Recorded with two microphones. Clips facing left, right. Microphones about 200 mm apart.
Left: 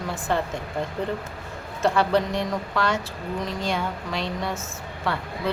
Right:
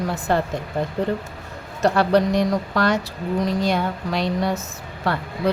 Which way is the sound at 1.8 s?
40° right (ahead or behind).